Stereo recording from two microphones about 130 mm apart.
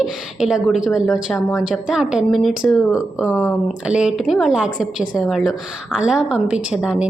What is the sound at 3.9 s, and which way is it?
A woman's voice, 5° right (ahead or behind).